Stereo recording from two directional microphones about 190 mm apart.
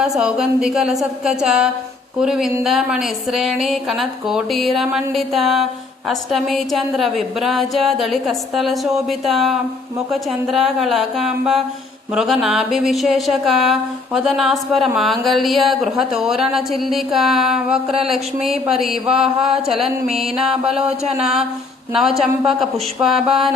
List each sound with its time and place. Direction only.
0.0 s speech: 5° right (ahead or behind)
20.1 s music: 30° right (ahead or behind)
20.4 s speech: 5° right (ahead or behind)